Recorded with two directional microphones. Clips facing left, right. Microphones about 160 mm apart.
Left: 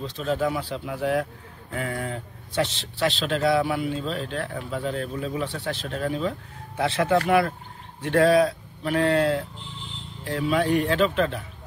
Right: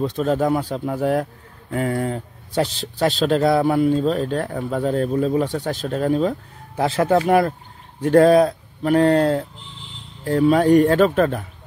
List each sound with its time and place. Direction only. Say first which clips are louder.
0.0 s a man's voice: right 6 dB; 50° right (ahead or behind)